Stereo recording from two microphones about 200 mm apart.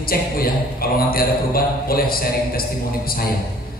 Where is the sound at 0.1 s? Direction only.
45° left (ahead or behind).